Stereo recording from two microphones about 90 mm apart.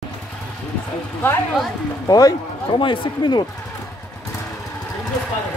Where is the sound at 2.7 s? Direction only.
60° left (ahead or behind).